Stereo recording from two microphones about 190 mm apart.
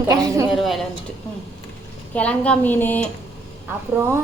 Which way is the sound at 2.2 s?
5° left (ahead or behind).